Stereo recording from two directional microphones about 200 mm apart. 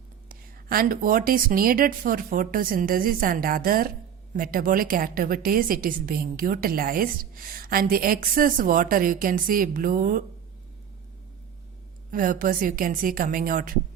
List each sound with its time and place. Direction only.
0.3 s a woman's voice: 45° right (ahead or behind)
12.1 s a woman's voice: 45° right (ahead or behind)